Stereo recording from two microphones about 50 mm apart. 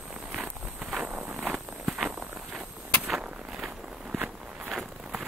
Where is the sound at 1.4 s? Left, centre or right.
Centre.